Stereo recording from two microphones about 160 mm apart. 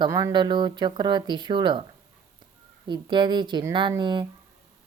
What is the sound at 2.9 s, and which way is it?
Speech, 30° right (ahead or behind).